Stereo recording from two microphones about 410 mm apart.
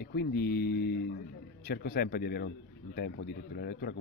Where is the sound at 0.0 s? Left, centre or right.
Left.